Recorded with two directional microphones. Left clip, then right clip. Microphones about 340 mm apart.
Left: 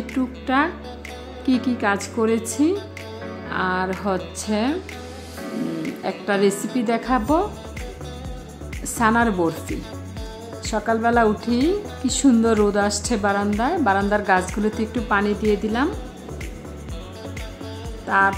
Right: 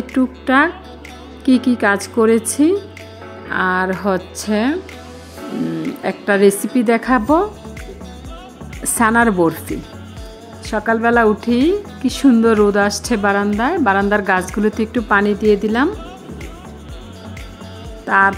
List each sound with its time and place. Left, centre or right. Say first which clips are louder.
0.1 s speech: right 7 dB; centre
3.4 s music: right 6 dB; centre
4.0 s speech: right 5 dB; centre
6.0 s speech: right 7 dB; centre
8.8 s speech: right 5 dB; centre
10.7 s speech: right 5 dB; centre
18.0 s music: right 5 dB; centre